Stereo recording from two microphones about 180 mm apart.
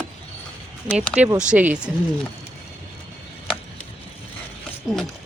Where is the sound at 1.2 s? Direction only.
5° right (ahead or behind).